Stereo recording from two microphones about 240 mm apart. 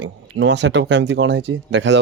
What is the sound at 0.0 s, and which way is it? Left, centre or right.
Speech, right.